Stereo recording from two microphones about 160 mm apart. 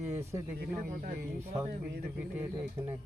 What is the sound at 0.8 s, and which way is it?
Speech, 60° right (ahead or behind).